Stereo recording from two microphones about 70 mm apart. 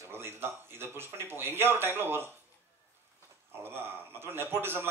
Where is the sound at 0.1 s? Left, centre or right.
Right.